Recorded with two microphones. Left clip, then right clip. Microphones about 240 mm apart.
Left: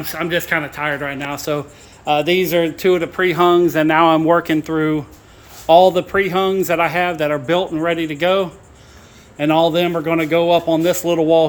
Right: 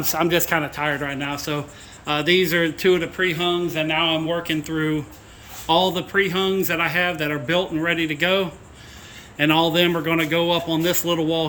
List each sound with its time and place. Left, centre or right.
0.0 s a man's voice: centre